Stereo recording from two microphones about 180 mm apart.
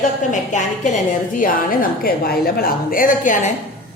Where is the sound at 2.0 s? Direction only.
60° left (ahead or behind).